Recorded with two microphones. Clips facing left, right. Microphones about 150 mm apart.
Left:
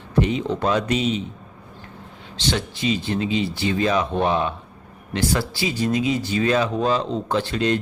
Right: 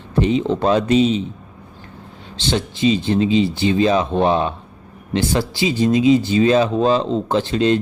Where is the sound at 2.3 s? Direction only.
25° right (ahead or behind).